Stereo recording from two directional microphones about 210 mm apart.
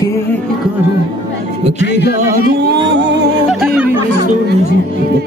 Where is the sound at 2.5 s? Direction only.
50° right (ahead or behind).